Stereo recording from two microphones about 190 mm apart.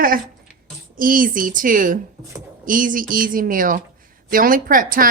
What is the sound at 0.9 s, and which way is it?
Speech, 45° right (ahead or behind).